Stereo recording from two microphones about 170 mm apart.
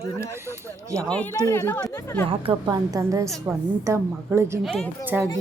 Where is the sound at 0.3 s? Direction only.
15° right (ahead or behind).